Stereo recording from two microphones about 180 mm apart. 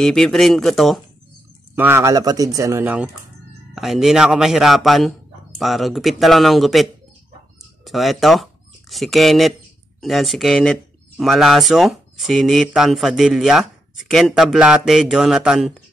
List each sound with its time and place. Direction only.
0.0 s speech: centre (ahead or behind)
1.8 s a man's voice: 15° right (ahead or behind)